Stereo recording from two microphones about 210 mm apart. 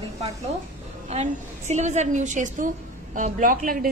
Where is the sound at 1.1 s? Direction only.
35° right (ahead or behind).